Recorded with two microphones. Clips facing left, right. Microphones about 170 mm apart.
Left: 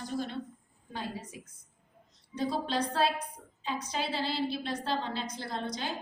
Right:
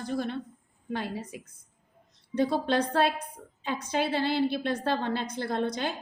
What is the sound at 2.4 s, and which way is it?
A woman's voice, 60° right (ahead or behind).